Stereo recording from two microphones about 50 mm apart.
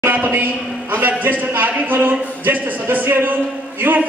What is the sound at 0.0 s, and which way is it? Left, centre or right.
A man's voice, right.